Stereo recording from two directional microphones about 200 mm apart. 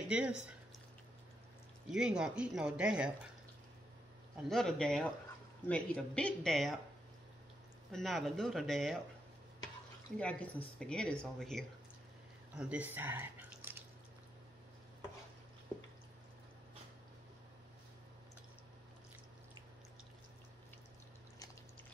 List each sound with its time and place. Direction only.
0.1 s speech: 5° right (ahead or behind)
1.9 s speech: 5° right (ahead or behind)
4.5 s speech: centre (ahead or behind)
7.9 s speech: centre (ahead or behind)
10.1 s speech: 5° left (ahead or behind); by 13.8 s 10° right (ahead or behind)